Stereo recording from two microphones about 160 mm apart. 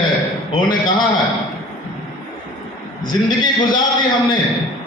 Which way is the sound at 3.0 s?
25° left (ahead or behind).